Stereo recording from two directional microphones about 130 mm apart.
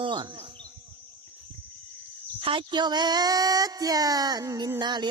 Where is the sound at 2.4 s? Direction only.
40° right (ahead or behind).